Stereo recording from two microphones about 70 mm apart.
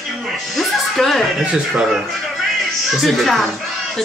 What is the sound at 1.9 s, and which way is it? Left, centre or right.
Music, centre.